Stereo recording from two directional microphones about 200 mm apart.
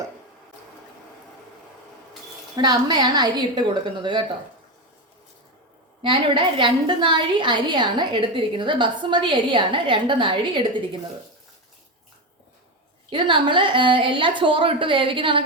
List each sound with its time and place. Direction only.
2.6 s a woman's voice: 20° right (ahead or behind)
6.0 s a woman's voice: 25° right (ahead or behind)
13.1 s a woman's voice: 25° right (ahead or behind)